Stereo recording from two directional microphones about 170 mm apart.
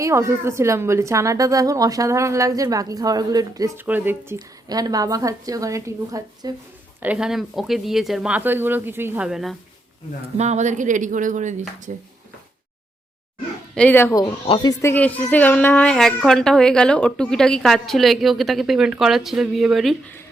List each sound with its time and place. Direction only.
0.0 s a woman's voice: 15° right (ahead or behind)
7.0 s speech: 5° right (ahead or behind)
10.3 s speech: 40° right (ahead or behind)
13.7 s speech: 10° left (ahead or behind)
14.4 s speech: 25° left (ahead or behind); by 20.0 s centre (ahead or behind)